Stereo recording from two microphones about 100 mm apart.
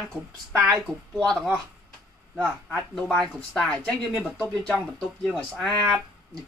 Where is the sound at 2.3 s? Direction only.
5° right (ahead or behind).